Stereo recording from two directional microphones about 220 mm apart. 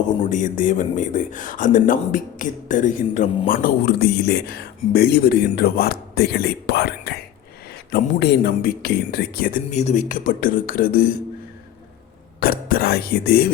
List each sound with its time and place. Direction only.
0.3 s speech: 35° left (ahead or behind)
12.4 s speech: 40° left (ahead or behind)